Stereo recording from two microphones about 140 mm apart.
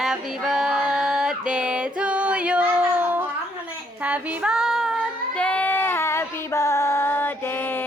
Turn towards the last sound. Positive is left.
turn(degrees=15)  # may be behind; listen again after turning